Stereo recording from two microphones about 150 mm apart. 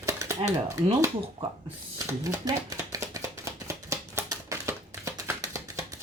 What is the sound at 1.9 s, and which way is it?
Chopping, 25° right (ahead or behind).